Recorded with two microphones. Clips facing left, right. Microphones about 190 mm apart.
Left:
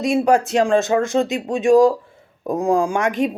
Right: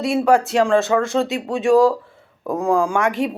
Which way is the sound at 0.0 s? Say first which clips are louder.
Even; 20° left (ahead or behind).